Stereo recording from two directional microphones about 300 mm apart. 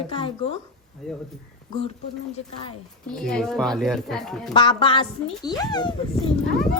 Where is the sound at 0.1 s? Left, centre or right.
Centre.